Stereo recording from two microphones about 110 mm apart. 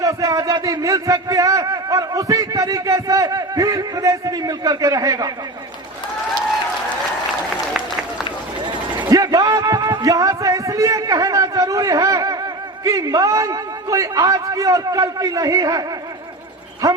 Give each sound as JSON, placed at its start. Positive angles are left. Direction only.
{"t": 0.0, "sound": "a man's voice", "side_deg": -30}
{"t": 8.6, "sound": "a sound", "side_deg": -40}
{"t": 16.8, "sound": "a man's voice", "side_deg": -35}